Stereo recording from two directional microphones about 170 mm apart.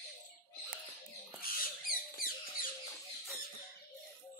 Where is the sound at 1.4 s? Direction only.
55° left (ahead or behind).